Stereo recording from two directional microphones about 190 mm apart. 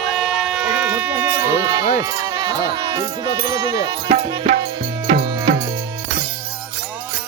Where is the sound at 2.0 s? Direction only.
20° right (ahead or behind).